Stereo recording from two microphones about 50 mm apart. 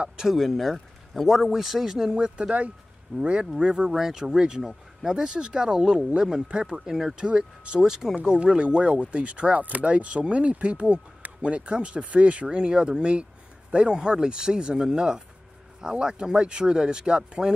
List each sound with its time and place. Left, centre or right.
0.3 s a man's voice: centre
8.2 s speech: right